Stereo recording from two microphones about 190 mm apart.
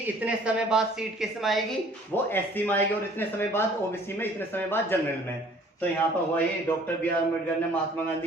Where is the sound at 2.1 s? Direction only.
10° left (ahead or behind).